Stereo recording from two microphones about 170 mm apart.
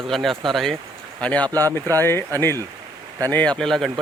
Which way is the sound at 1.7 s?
20° right (ahead or behind).